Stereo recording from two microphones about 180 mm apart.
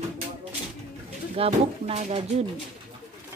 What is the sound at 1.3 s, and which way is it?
Speech, 35° right (ahead or behind).